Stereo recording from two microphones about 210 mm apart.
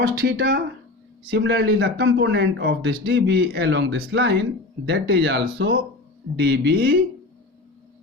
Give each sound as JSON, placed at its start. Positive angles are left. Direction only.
{"t": 0.0, "sound": "speech", "side_deg": -55}